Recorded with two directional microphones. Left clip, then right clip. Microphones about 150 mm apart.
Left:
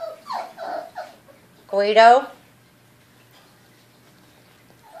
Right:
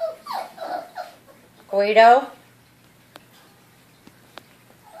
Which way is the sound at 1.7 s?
5° left (ahead or behind).